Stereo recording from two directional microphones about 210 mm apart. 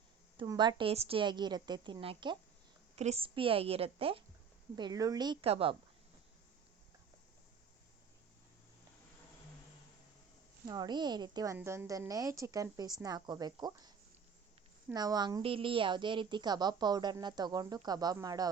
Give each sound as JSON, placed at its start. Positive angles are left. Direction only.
{"t": 0.3, "sound": "a woman's voice", "side_deg": -20}
{"t": 10.7, "sound": "a woman's voice", "side_deg": -20}